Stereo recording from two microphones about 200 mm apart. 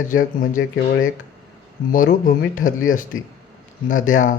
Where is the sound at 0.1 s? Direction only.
40° left (ahead or behind).